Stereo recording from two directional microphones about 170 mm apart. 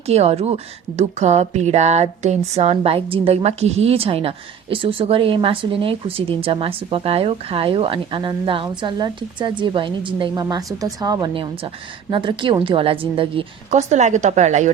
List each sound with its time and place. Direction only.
0.0 s a woman's voice: 40° right (ahead or behind)